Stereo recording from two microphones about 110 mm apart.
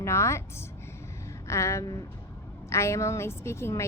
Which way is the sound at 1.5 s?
25° left (ahead or behind).